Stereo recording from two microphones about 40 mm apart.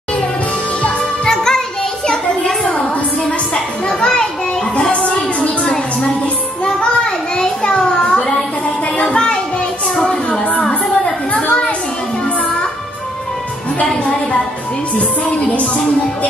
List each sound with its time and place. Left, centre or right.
1.2 s music: centre
4.0 s music: centre
4.7 s music: left
6.6 s a sound: left
8.9 s music: left
10.6 s a sound: left
15.0 s music: left